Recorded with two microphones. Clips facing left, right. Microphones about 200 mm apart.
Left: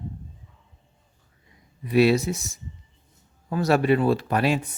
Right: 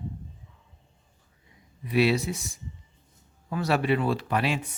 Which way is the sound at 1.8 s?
45° left (ahead or behind).